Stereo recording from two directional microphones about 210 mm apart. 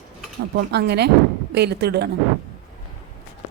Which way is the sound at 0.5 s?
50° right (ahead or behind).